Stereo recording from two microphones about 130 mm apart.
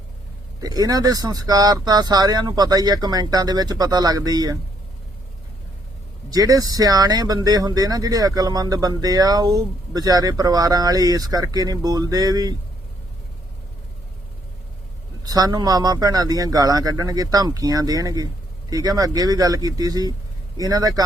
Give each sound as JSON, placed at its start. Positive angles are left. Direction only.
{"t": 0.6, "sound": "speech", "side_deg": -30}
{"t": 6.3, "sound": "speech", "side_deg": -30}
{"t": 15.2, "sound": "speech", "side_deg": -30}